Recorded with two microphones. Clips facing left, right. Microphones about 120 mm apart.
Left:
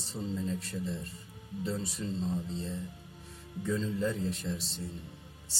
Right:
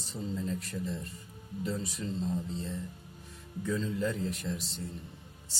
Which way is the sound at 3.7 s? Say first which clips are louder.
Even; 25° left (ahead or behind).